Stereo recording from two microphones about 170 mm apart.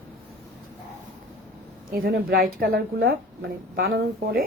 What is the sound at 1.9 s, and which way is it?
Speech, 60° right (ahead or behind).